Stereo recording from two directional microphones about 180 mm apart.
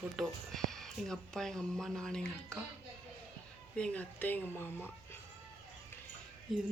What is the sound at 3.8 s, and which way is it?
Speech, 10° left (ahead or behind).